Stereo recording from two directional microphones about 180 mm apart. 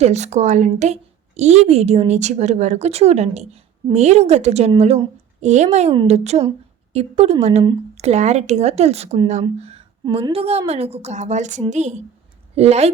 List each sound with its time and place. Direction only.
0.0 s speech: 40° right (ahead or behind)